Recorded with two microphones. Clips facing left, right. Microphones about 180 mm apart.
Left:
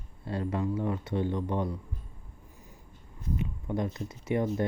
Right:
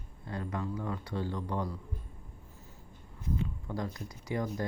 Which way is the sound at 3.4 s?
20° left (ahead or behind).